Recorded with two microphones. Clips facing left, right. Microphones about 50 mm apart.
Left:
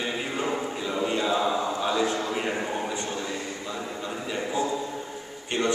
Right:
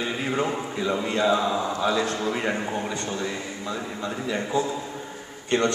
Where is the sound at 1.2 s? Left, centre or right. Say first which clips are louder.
Right 5 dB; centre.